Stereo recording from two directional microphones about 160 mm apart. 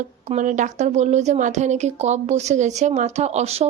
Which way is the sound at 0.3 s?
50° right (ahead or behind).